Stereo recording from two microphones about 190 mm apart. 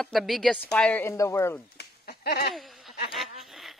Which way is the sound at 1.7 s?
55° left (ahead or behind).